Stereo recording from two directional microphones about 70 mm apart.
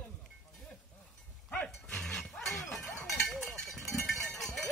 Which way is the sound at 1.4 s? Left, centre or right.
Centre.